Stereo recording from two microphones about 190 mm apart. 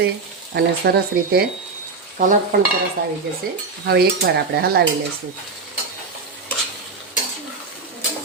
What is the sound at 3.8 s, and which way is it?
Stir, 55° right (ahead or behind).